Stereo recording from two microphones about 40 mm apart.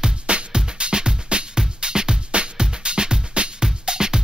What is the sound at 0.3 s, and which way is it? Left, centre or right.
Music, right.